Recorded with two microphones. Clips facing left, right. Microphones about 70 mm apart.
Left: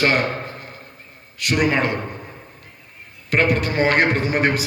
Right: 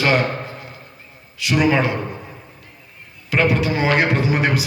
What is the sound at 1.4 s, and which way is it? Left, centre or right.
Speech, left.